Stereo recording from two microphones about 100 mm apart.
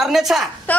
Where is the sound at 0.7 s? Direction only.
15° left (ahead or behind).